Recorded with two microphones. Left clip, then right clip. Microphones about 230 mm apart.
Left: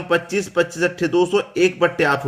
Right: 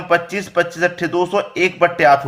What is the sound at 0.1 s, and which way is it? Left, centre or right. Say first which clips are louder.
A man's voice: right 3 dB; centre.